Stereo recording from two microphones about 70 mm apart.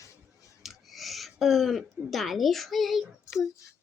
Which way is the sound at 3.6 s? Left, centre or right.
Left.